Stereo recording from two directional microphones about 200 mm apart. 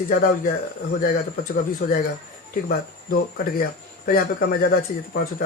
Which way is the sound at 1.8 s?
45° left (ahead or behind).